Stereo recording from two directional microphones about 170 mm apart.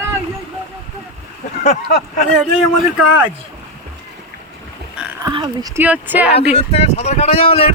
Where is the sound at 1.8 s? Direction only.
60° left (ahead or behind).